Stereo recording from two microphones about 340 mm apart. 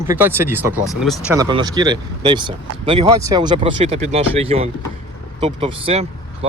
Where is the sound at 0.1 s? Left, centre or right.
Centre.